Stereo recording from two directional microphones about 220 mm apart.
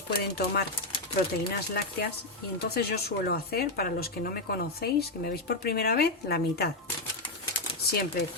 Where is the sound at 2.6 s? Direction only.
45° left (ahead or behind).